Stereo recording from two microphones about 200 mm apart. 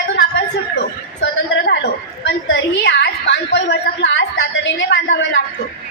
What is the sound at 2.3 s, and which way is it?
A woman's voice, 60° left (ahead or behind).